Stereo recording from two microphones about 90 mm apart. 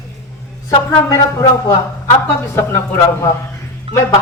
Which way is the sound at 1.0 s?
40° left (ahead or behind).